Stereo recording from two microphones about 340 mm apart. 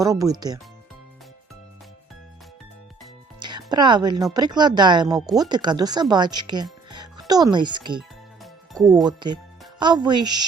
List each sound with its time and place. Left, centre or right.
0.0 s speech: centre
3.4 s speech: centre
8.8 s speech: centre
9.0 s speech: centre